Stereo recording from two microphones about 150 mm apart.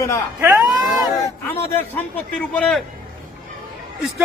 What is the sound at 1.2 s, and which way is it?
A man's voice, 15° left (ahead or behind).